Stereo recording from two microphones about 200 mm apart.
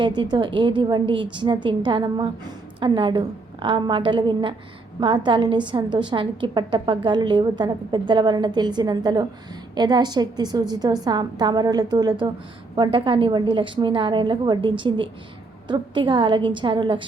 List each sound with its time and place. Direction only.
0.0 s a woman's voice: 25° right (ahead or behind)